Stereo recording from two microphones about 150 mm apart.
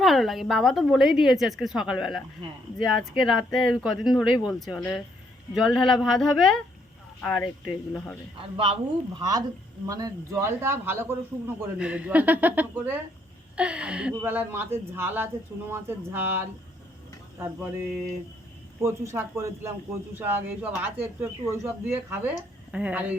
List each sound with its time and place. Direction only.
0.0 s a woman's voice: centre (ahead or behind)
8.4 s a woman's voice: 35° right (ahead or behind); by 21.7 s 15° right (ahead or behind)
22.7 s a man's voice: 10° right (ahead or behind)